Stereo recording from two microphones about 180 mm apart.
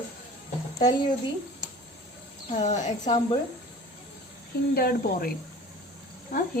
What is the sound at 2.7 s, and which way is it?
Speech, 40° left (ahead or behind).